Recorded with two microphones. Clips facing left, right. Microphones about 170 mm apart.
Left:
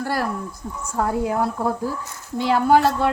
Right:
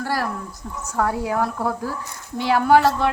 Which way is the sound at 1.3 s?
25° left (ahead or behind).